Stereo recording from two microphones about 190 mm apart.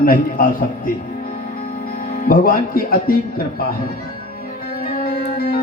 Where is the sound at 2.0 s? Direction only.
50° left (ahead or behind).